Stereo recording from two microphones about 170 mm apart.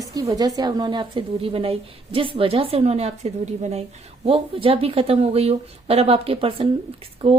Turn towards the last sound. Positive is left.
turn(degrees=-35)  # may be behind; listen again after turning